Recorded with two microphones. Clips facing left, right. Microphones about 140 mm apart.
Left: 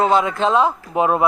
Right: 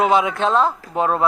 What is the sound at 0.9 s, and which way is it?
Speech, 15° left (ahead or behind).